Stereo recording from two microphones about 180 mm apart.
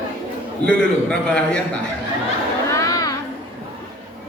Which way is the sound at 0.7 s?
5° left (ahead or behind).